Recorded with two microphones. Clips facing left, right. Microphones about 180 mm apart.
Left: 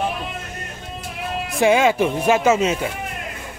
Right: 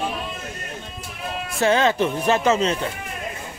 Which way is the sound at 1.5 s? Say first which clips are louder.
Left 3 dB; 10° left (ahead or behind).